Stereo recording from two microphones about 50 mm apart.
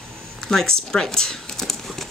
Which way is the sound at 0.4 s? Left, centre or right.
Centre.